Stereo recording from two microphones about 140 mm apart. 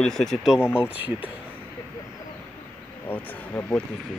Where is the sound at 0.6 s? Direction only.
15° left (ahead or behind).